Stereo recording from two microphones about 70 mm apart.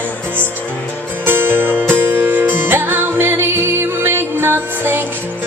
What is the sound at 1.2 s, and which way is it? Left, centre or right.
Music, right.